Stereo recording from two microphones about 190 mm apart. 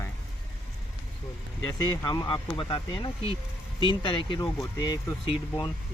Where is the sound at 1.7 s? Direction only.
20° left (ahead or behind).